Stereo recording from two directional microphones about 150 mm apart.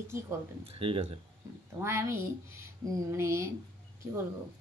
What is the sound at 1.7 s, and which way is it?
A woman's voice, 20° right (ahead or behind).